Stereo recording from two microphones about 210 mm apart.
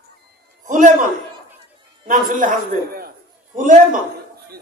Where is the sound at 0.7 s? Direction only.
40° right (ahead or behind).